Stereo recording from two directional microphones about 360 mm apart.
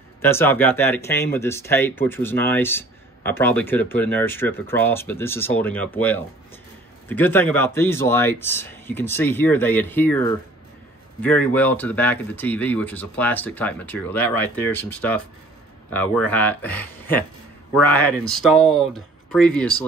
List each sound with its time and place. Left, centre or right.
0.2 s speech: centre